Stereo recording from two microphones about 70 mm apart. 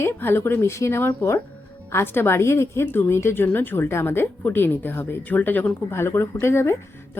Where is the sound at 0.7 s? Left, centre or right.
Left.